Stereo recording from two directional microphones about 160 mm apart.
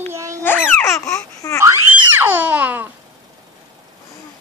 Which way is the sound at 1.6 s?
15° right (ahead or behind).